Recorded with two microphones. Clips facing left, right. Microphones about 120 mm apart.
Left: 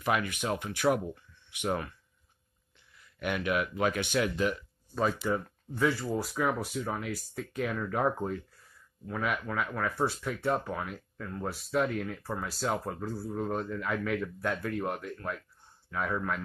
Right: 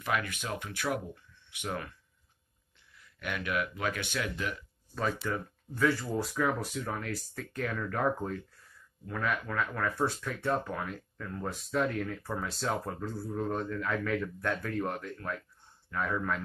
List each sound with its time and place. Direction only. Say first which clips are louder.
0.0 s speech: left 3 dB; 20° left (ahead or behind)
3.2 s speech: left 3 dB; 20° left (ahead or behind)